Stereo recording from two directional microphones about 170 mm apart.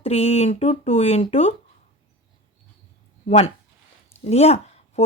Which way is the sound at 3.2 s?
40° left (ahead or behind).